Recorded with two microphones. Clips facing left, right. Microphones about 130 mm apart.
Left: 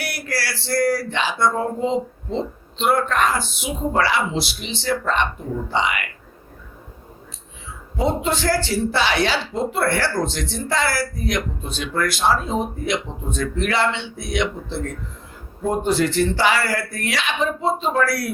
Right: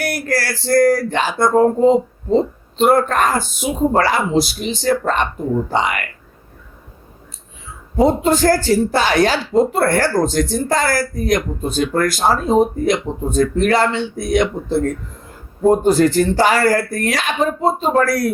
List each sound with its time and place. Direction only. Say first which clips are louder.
0.0 s speech: right 7 dB; 45° right (ahead or behind)
7.9 s speech: right 7 dB; 45° right (ahead or behind)